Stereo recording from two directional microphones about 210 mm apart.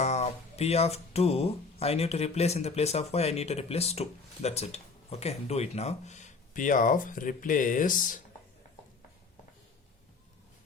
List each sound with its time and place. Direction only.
0.0 s speech: 30° left (ahead or behind)